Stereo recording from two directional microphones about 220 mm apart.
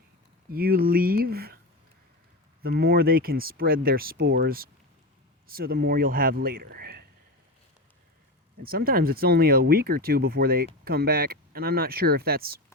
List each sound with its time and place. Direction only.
0.5 s speech: 45° right (ahead or behind)
2.6 s speech: 45° right (ahead or behind)
8.6 s speech: 45° right (ahead or behind)